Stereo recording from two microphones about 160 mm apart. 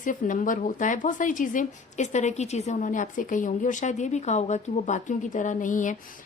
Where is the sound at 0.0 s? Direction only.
55° left (ahead or behind).